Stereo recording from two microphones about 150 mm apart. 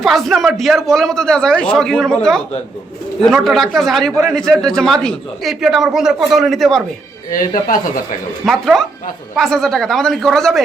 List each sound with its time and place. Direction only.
0.0 s a man's voice: centre (ahead or behind)
7.3 s speech: 65° left (ahead or behind)
8.4 s a man's voice: centre (ahead or behind)